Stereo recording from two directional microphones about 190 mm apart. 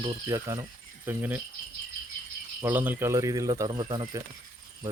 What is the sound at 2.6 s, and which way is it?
Speech, 10° right (ahead or behind).